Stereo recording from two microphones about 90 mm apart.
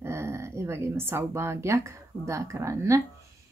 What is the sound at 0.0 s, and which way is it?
A woman's voice, 30° right (ahead or behind).